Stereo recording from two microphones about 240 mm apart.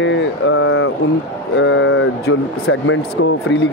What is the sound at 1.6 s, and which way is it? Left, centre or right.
Speech, left.